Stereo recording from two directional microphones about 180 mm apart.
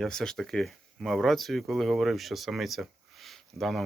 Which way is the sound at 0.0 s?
5° left (ahead or behind).